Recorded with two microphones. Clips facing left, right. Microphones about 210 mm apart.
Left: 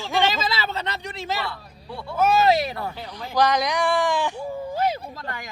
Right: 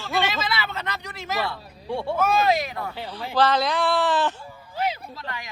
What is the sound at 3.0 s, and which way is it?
Speech, 10° right (ahead or behind).